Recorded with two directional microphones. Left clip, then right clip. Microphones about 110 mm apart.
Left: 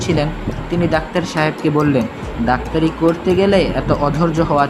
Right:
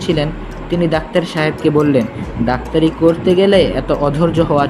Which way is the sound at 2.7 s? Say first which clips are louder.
Right 3 dB; 15° right (ahead or behind).